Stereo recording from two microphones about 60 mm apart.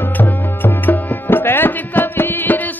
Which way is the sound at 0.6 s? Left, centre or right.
Left.